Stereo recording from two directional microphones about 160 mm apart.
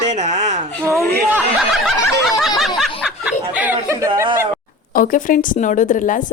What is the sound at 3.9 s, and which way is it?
Speech, 20° right (ahead or behind).